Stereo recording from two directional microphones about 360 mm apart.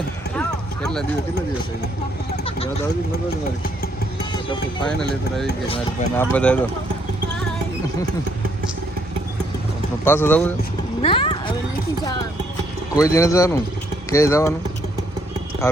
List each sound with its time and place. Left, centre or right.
0.3 s a sound: centre
2.4 s a sound: centre
4.9 s speech: centre
5.6 s speech: centre
6.3 s speech: centre
10.0 s speech: centre
11.0 s vehicle: centre
13.0 s speech: centre
15.6 s speech: centre